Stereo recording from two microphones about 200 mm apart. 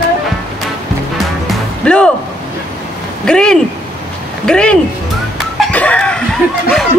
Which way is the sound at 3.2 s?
5° left (ahead or behind).